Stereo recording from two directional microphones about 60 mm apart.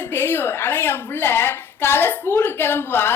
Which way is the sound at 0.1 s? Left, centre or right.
Left.